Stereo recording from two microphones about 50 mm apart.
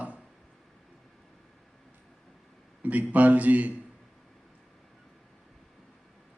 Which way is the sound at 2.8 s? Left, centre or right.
Right.